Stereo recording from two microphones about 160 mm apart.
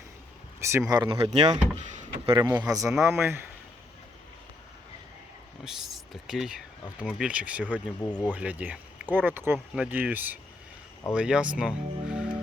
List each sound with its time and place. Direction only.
0.6 s speech: 20° right (ahead or behind); by 2.3 s 45° right (ahead or behind)
2.4 s speech: 20° right (ahead or behind)
5.6 s speech: centre (ahead or behind)